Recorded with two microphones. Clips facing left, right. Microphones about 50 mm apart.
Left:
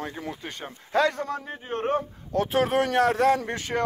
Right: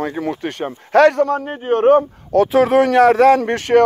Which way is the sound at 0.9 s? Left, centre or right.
Right.